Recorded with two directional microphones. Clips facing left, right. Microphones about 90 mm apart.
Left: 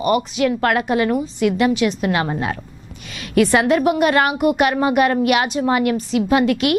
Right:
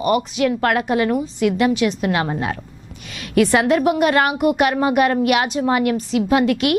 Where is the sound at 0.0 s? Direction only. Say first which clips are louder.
Even; 15° left (ahead or behind).